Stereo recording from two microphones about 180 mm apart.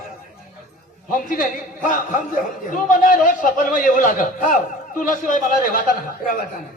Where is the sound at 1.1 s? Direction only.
50° left (ahead or behind).